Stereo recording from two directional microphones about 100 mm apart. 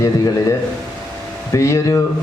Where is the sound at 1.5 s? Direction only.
30° left (ahead or behind).